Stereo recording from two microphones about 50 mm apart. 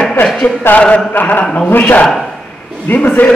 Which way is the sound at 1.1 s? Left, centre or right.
Left.